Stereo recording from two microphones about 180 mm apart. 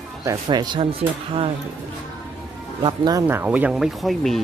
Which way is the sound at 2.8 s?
25° right (ahead or behind).